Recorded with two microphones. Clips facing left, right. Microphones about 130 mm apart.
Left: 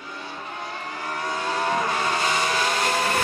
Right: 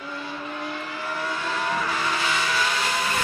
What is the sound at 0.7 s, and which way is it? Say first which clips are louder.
Vehicle: right 1 dB; 40° left (ahead or behind).